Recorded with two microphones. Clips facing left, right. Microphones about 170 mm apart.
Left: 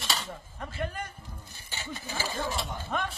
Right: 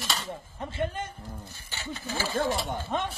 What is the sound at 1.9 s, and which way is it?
Speech, 10° left (ahead or behind).